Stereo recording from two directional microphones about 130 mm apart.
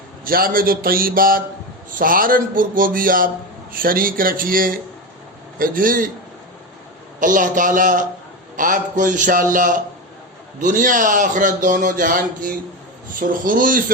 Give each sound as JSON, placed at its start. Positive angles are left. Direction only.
{"t": 0.3, "sound": "speech", "side_deg": -90}
{"t": 7.2, "sound": "speech", "side_deg": -85}